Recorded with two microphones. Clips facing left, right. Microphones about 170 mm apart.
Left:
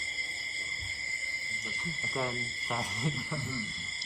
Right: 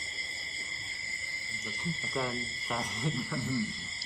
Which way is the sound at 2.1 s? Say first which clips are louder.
Left 1 dB; 5° left (ahead or behind).